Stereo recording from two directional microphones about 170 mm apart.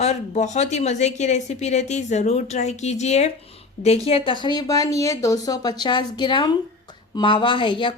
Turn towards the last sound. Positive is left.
turn(degrees=30)  # may be behind; listen again after turning